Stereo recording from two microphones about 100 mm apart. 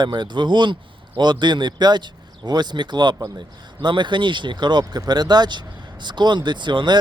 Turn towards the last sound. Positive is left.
turn(degrees=-50)  # may be behind; listen again after turning